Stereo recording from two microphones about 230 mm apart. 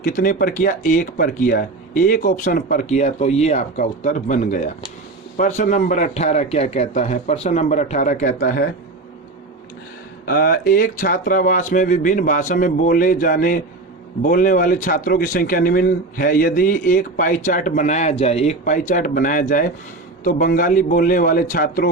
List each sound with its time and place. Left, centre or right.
0.0 s speech: left
10.2 s speech: left